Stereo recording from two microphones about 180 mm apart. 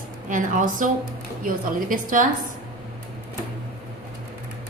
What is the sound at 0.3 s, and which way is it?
A woman's voice, 45° right (ahead or behind).